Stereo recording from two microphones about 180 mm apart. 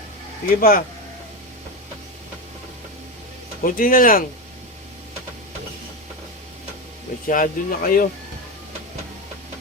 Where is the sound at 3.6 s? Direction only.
50° left (ahead or behind).